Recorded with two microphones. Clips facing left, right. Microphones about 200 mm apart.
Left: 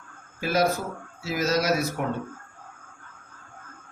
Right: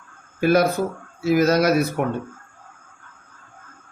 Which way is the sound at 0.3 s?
60° right (ahead or behind).